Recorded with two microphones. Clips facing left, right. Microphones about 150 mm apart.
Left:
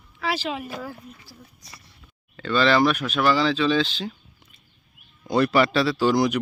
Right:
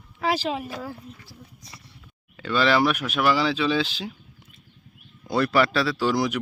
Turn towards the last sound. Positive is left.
turn(degrees=0)  # may be behind; listen again after turning